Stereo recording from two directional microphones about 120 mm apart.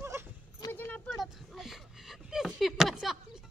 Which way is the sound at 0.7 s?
20° left (ahead or behind).